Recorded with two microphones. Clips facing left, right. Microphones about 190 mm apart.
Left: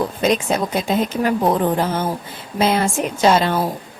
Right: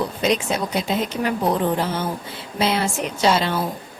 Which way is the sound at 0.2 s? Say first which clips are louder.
Left 3 dB; 50° left (ahead or behind).